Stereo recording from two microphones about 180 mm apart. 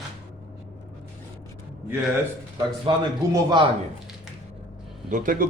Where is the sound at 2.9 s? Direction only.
25° right (ahead or behind).